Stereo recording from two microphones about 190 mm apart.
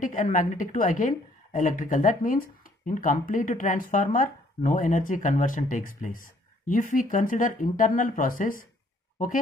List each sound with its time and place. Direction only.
0.0 s a woman's voice: 45° left (ahead or behind)